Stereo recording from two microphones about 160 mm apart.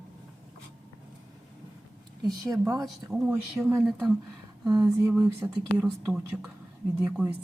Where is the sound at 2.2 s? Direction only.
20° right (ahead or behind).